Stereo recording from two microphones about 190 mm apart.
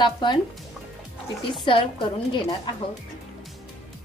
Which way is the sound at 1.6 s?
25° left (ahead or behind).